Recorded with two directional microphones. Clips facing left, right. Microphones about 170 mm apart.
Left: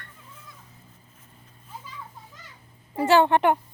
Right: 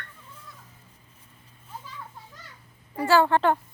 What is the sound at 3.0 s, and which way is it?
Speech, 20° left (ahead or behind).